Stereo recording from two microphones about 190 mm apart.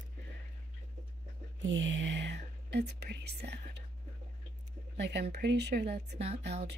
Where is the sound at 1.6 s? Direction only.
85° right; by 3.7 s 60° right (ahead or behind).